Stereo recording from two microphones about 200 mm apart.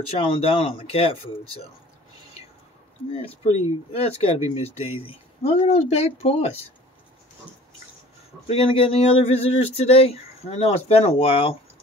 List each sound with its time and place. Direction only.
0.1 s speech: 30° left (ahead or behind)
3.9 s speech: 30° left (ahead or behind)
8.5 s speech: 30° left (ahead or behind)